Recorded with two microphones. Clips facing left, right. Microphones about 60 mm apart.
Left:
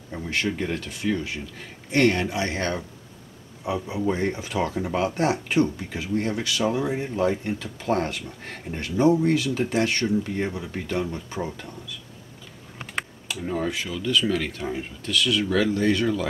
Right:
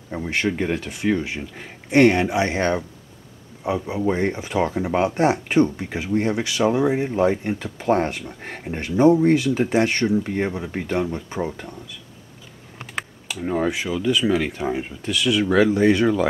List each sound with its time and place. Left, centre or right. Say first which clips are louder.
0.1 s speech: right 4 dB; right
3.7 s speech: right 3 dB; centre
4.0 s speech: right 2 dB; right
5.5 s speech: right 4 dB; right
12.7 s typing: right 1 dB; centre
13.4 s speech: right 5 dB; centre